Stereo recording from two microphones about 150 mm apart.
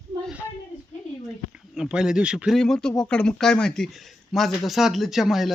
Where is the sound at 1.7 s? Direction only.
5° right (ahead or behind).